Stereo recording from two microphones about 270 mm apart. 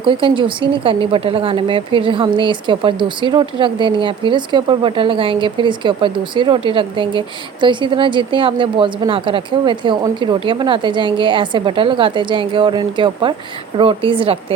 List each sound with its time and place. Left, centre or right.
0.0 s a woman's voice: centre